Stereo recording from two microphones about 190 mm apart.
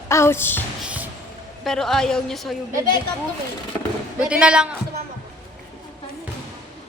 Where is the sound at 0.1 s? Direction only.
15° left (ahead or behind).